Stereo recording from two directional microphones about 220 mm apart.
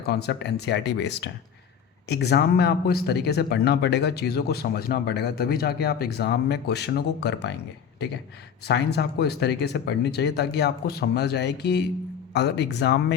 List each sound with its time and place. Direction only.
0.0 s speech: 45° left (ahead or behind)
8.6 s speech: 50° left (ahead or behind)